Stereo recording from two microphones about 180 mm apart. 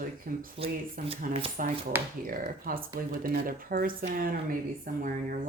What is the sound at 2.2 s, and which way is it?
Speech, 50° right (ahead or behind).